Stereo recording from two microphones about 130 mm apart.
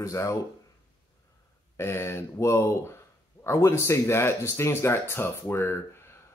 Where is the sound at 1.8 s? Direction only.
20° left (ahead or behind).